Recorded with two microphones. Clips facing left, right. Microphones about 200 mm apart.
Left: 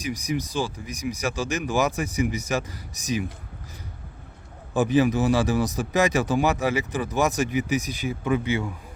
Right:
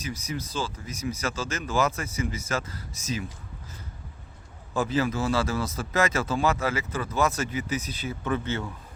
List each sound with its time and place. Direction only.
0.0 s speech: 15° left (ahead or behind)
4.7 s speech: 15° left (ahead or behind)